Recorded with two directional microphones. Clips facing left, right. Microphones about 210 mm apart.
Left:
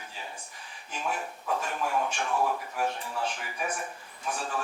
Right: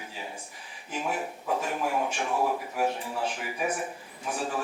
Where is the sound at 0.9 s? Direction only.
5° right (ahead or behind).